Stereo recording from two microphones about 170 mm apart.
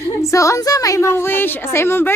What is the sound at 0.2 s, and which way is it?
A woman's voice, 20° left (ahead or behind).